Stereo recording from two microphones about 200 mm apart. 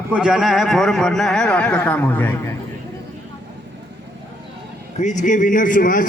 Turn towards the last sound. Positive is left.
turn(degrees=45)  # may be behind; listen again after turning